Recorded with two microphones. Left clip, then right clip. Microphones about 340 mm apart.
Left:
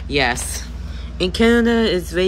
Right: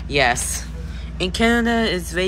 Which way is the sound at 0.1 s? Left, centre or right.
Centre.